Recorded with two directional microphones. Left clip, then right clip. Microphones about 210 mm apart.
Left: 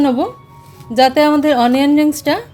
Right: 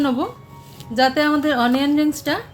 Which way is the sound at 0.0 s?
30° left (ahead or behind).